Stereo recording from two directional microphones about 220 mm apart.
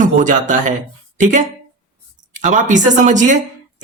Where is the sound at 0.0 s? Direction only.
35° right (ahead or behind).